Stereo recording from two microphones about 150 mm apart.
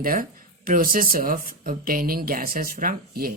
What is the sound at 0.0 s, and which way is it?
Speech, 70° right (ahead or behind).